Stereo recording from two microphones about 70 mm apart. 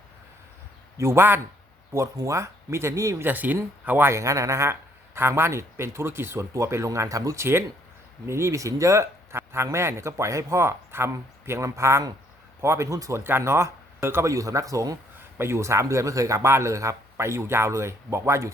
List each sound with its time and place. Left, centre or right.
0.9 s speech: right
2.1 s speech: right
3.2 s speech: right
4.1 s speech: right
15.4 s speech: right